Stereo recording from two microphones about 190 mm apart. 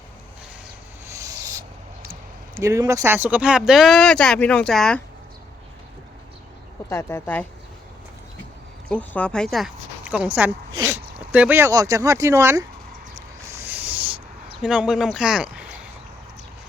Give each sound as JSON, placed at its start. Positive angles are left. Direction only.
{"t": 1.0, "sound": "rub", "side_deg": -15}
{"t": 2.6, "sound": "speech", "side_deg": -15}
{"t": 6.9, "sound": "speech", "side_deg": 10}
{"t": 8.9, "sound": "a woman's voice", "side_deg": 5}
{"t": 13.1, "sound": "a sound", "side_deg": -15}
{"t": 14.6, "sound": "speech", "side_deg": -5}